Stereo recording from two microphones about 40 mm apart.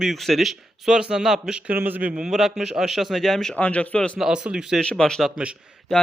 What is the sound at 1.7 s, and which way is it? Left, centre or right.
Speech, right.